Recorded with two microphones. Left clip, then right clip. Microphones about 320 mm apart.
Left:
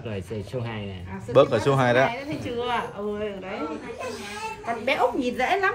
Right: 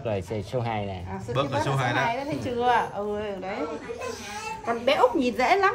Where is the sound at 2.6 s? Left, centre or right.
Right.